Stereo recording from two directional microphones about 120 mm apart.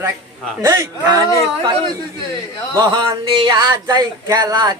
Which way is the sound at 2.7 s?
35° right (ahead or behind).